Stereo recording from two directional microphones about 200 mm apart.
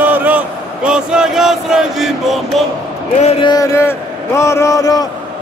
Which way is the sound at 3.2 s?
25° left (ahead or behind).